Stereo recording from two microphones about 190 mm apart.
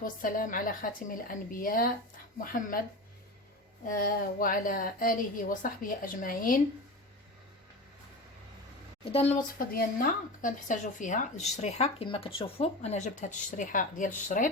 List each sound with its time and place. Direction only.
0.0 s a woman's voice: 45° left (ahead or behind)
3.8 s a woman's voice: 50° left (ahead or behind)
9.1 s speech: 30° left (ahead or behind)
9.6 s speech: 45° left (ahead or behind)